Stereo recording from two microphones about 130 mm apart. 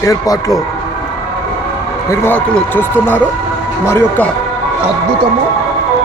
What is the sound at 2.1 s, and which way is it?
A man's voice, 15° left (ahead or behind).